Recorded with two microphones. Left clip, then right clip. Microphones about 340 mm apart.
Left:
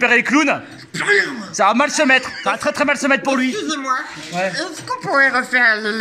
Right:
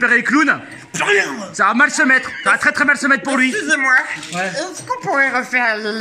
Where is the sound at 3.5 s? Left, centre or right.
Right.